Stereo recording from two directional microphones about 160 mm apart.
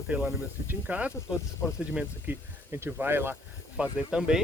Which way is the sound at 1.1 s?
15° left (ahead or behind).